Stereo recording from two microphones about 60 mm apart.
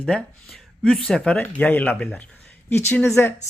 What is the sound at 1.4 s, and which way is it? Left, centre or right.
Speech, left.